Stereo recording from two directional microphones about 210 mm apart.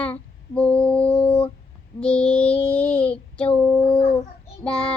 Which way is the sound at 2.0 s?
5° left (ahead or behind).